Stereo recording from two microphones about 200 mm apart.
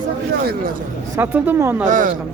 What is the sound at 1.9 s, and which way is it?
Speech, 40° right (ahead or behind).